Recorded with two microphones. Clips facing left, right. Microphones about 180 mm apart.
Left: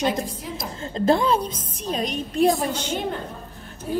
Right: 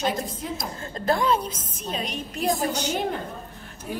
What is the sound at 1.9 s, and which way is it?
Speech, 40° left (ahead or behind).